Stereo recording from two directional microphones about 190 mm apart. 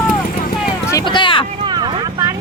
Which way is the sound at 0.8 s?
20° left (ahead or behind).